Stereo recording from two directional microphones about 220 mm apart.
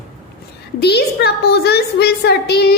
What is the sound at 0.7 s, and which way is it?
A woman's voice, 50° left (ahead or behind).